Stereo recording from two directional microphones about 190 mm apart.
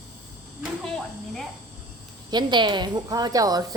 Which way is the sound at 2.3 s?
25° right (ahead or behind).